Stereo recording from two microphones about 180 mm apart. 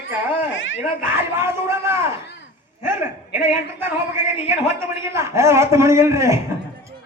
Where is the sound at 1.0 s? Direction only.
15° right (ahead or behind).